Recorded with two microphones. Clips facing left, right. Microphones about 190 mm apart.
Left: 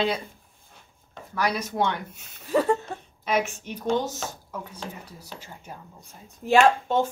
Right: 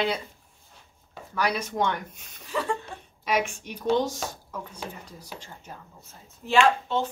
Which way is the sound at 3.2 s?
10° right (ahead or behind).